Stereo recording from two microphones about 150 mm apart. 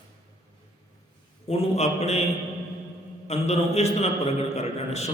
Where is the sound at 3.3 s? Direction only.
45° left (ahead or behind).